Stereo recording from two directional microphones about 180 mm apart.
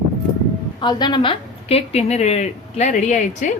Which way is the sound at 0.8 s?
25° left (ahead or behind).